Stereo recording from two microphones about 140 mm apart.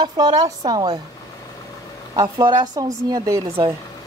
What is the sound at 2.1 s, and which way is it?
Speech, 25° right (ahead or behind).